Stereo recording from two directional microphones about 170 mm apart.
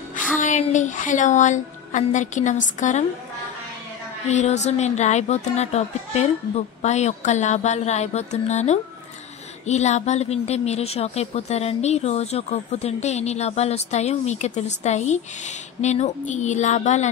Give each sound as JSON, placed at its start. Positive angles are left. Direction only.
{"t": 0.4, "sound": "a woman's voice", "side_deg": 45}
{"t": 4.3, "sound": "speech", "side_deg": 45}